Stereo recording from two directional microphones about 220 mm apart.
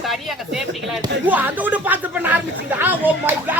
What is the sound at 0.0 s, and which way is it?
A woman's voice, centre (ahead or behind).